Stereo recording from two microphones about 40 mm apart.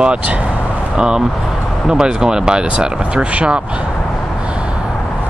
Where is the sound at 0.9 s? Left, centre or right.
Right.